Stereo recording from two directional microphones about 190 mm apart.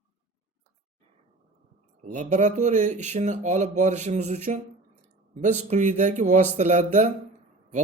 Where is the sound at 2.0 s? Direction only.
40° right (ahead or behind).